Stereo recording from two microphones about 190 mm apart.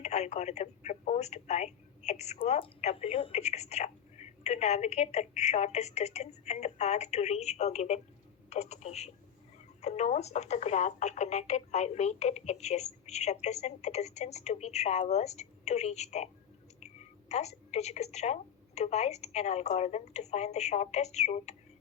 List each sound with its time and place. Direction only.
0.0 s speech: 35° left (ahead or behind)